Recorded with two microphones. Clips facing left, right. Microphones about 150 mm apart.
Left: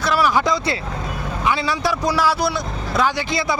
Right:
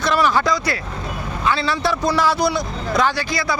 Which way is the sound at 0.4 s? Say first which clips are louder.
Even; 25° left (ahead or behind).